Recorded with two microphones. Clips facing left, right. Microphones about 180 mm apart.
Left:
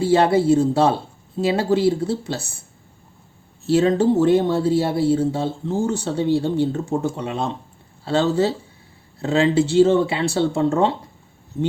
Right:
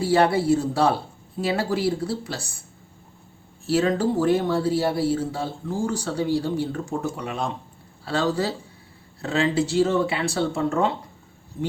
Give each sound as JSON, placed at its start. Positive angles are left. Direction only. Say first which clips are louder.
{"t": 0.0, "sound": "speech", "louder": "left 3 dB", "side_deg": 25}
{"t": 3.7, "sound": "speech", "louder": "left 5 dB", "side_deg": 25}